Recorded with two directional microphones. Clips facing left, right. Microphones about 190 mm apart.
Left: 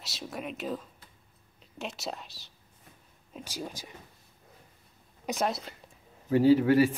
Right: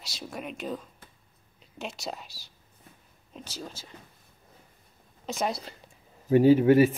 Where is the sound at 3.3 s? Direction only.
10° left (ahead or behind).